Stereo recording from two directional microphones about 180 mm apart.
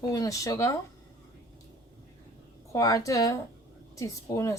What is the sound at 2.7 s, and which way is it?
Speech, 20° left (ahead or behind).